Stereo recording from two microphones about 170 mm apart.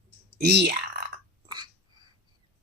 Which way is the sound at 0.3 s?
75° right (ahead or behind).